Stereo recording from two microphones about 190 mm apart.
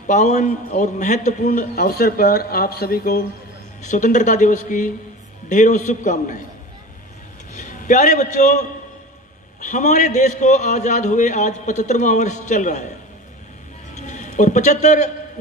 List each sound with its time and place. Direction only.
0.0 s a man's voice: 40° left (ahead or behind)
3.8 s a man's voice: 40° left (ahead or behind)
7.5 s a man's voice: 40° left (ahead or behind)
13.9 s a man's voice: 40° left (ahead or behind)